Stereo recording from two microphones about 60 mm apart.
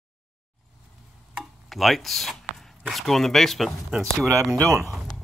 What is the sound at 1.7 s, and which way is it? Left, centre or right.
Speech, centre.